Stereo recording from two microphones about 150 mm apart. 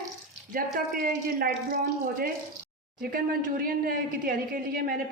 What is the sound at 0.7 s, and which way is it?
A woman's voice, 70° right (ahead or behind).